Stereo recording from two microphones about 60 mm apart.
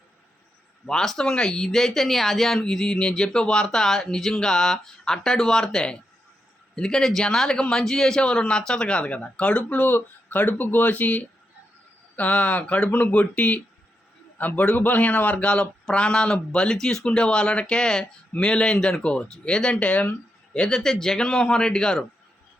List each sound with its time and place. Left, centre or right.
0.9 s speech: centre